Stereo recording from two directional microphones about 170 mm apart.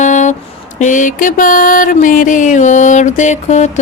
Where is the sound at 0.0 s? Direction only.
45° left (ahead or behind).